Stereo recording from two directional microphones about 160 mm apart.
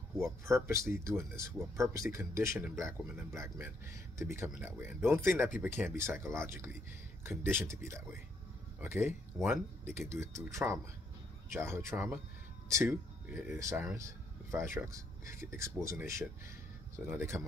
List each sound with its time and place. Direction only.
0.2 s speech: 20° right (ahead or behind)